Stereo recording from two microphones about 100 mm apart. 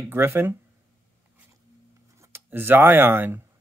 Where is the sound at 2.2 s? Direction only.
20° right (ahead or behind).